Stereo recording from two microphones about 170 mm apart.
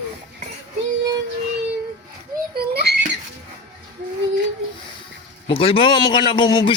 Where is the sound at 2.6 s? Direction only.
70° right (ahead or behind).